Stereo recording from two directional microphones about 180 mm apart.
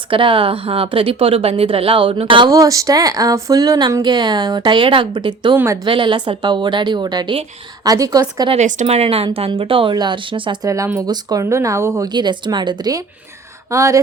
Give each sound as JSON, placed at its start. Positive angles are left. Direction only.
{"t": 0.1, "sound": "speech", "side_deg": -30}
{"t": 5.5, "sound": "speech", "side_deg": -15}
{"t": 5.8, "sound": "speech", "side_deg": -25}
{"t": 8.5, "sound": "speech", "side_deg": -40}